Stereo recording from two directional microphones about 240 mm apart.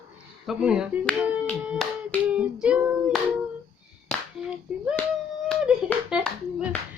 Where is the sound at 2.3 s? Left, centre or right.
Centre.